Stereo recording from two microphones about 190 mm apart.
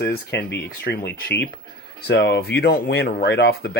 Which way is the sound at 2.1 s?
65° left (ahead or behind).